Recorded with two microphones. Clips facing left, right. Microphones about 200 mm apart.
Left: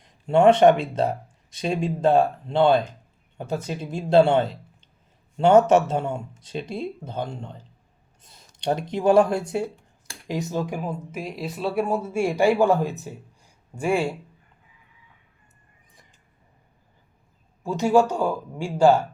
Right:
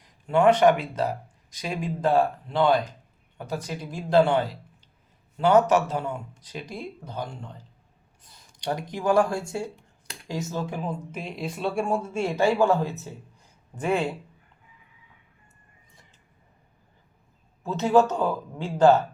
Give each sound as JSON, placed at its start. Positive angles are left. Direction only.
{"t": 0.3, "sound": "speech", "side_deg": 25}
{"t": 17.6, "sound": "speech", "side_deg": 15}